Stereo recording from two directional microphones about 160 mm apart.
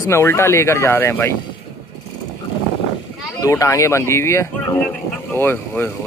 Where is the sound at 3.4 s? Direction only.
20° left (ahead or behind).